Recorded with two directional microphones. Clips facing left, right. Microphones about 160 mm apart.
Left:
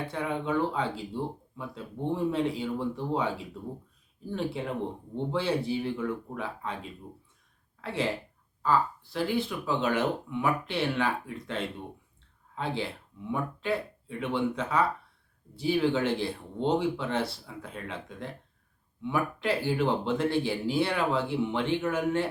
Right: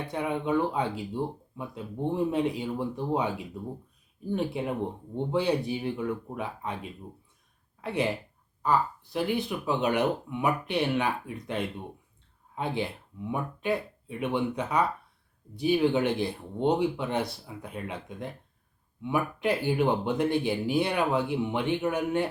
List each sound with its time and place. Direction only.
0.1 s speech: 15° right (ahead or behind)